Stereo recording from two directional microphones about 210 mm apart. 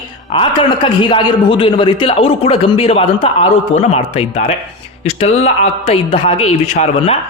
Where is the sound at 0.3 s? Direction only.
25° left (ahead or behind).